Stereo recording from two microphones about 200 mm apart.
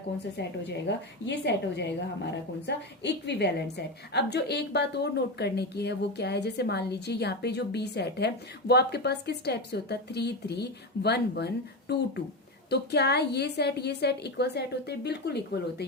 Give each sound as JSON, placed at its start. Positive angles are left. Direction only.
{"t": 0.9, "sound": "a woman's voice", "side_deg": 60}